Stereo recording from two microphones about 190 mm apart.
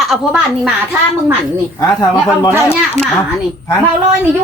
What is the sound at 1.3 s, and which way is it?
Speech, 15° left (ahead or behind).